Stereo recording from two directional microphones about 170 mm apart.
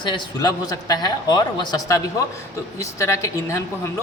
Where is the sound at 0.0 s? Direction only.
25° left (ahead or behind).